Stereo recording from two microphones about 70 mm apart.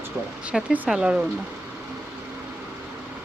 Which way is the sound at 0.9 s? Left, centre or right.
Centre.